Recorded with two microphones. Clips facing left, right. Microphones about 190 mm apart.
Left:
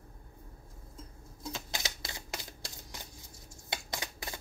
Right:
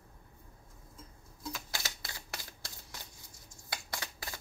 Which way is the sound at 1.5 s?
20° left (ahead or behind).